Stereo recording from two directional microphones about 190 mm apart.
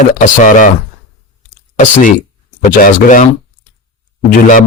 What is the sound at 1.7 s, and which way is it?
Speech, 40° left (ahead or behind).